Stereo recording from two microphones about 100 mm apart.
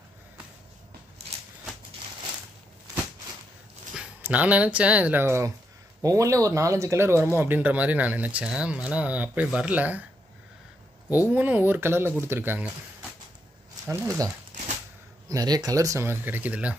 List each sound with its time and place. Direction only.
4.2 s speech: 15° right (ahead or behind)
11.2 s speech: 15° right (ahead or behind)
13.8 s speech: 35° right (ahead or behind); by 16.7 s 15° right (ahead or behind)